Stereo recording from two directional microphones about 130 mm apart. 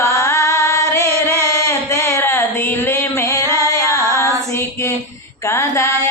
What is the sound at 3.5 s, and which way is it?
Female singing, 25° left (ahead or behind).